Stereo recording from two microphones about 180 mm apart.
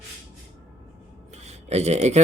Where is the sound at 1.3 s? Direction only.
40° right (ahead or behind).